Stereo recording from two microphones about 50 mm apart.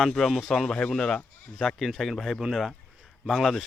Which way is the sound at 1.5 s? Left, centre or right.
Centre.